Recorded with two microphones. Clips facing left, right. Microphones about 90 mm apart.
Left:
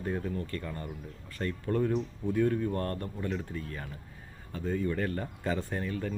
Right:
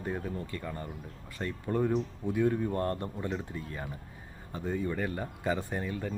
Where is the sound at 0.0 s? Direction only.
10° right (ahead or behind).